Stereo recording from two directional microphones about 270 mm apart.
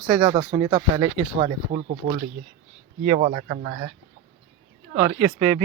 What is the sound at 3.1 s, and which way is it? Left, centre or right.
Speech, right.